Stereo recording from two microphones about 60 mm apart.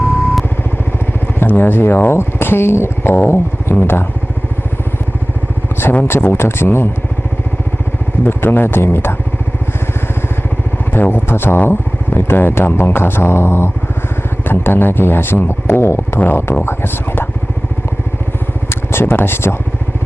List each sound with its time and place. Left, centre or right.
1.4 s speech: left
5.8 s speech: left
8.2 s speech: left
10.9 s speech: left
18.7 s speech: left